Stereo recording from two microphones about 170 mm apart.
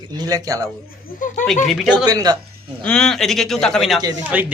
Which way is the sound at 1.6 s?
Centre (ahead or behind).